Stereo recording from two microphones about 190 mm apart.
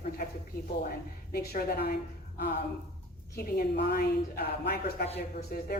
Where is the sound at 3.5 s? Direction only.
55° left (ahead or behind).